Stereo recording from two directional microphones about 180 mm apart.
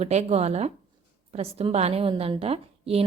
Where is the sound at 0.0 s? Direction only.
35° right (ahead or behind).